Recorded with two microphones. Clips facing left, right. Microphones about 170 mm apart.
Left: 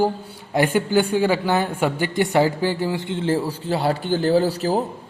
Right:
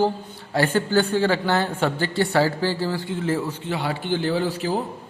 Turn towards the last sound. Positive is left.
turn(degrees=40)  # may be behind; listen again after turning